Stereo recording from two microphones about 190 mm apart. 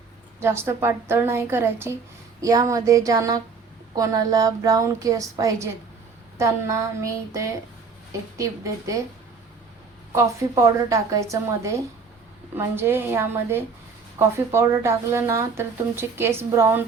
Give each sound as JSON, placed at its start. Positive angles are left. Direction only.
{"t": 0.4, "sound": "speech", "side_deg": -15}
{"t": 10.5, "sound": "speech", "side_deg": -15}